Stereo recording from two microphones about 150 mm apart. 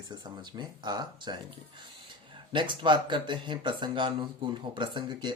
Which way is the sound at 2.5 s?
30° right (ahead or behind).